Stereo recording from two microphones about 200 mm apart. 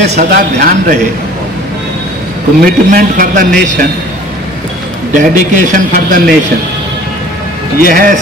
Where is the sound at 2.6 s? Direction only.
45° right (ahead or behind).